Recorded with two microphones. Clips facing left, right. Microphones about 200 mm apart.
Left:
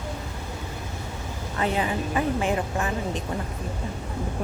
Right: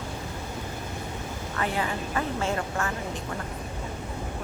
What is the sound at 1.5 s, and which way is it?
Speech, 20° left (ahead or behind).